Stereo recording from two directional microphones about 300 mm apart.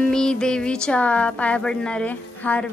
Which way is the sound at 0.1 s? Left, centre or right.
Centre.